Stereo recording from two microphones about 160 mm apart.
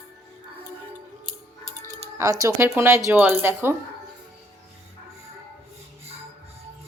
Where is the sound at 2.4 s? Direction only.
20° right (ahead or behind).